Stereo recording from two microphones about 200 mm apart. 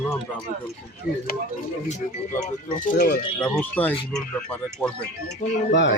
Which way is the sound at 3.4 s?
5° left (ahead or behind).